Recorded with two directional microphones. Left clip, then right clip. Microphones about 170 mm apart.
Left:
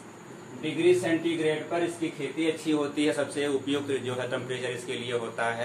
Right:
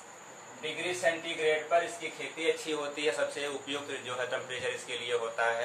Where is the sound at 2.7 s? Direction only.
15° left (ahead or behind).